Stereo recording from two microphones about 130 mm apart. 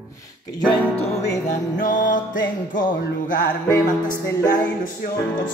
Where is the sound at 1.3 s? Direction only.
70° left (ahead or behind).